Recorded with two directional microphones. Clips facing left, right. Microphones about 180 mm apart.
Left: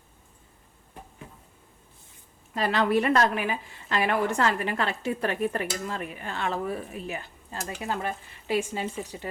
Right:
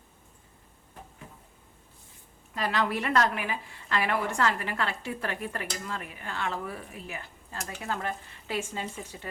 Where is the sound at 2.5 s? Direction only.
30° left (ahead or behind).